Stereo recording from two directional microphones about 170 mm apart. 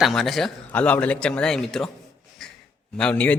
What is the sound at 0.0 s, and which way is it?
Speech, centre (ahead or behind).